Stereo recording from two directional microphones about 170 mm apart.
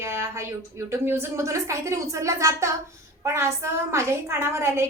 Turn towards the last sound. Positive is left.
turn(degrees=-15)  # may be behind; listen again after turning